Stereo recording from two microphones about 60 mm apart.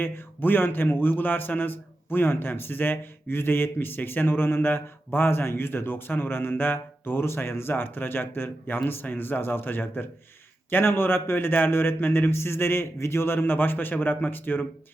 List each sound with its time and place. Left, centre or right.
0.0 s a man's voice: left